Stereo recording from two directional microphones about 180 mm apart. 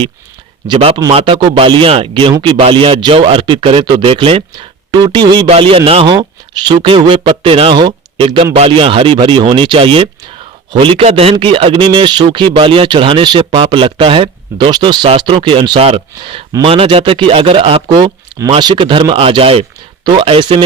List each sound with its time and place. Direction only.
0.7 s a man's voice: 30° right (ahead or behind)